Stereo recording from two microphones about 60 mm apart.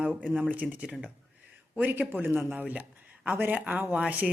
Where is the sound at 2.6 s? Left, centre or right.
Right.